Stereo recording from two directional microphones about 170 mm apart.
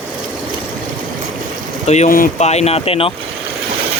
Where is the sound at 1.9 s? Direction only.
50° left (ahead or behind).